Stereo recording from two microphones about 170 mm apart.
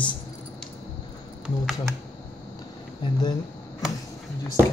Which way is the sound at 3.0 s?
25° left (ahead or behind).